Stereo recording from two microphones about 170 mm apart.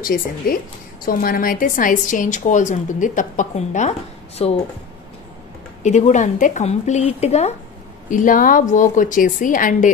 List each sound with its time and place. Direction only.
0.0 s a woman's voice: 55° left (ahead or behind); by 4.6 s 35° left (ahead or behind)
5.8 s a woman's voice: 45° left (ahead or behind)
8.1 s a woman's voice: 50° left (ahead or behind)